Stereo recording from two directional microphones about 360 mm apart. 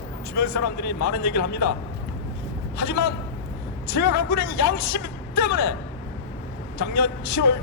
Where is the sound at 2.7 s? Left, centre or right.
Left.